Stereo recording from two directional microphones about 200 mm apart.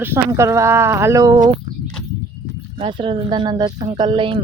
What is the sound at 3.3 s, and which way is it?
Speech, 20° right (ahead or behind).